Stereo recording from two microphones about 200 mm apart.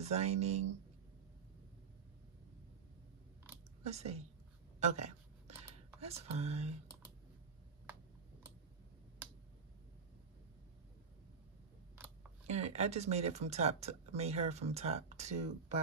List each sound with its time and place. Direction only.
0.0 s speech: 35° right (ahead or behind)
3.8 s speech: 35° right (ahead or behind)
4.7 s a sound: 35° right (ahead or behind)
5.9 s speech: 30° right (ahead or behind)
12.4 s speech: 35° right (ahead or behind)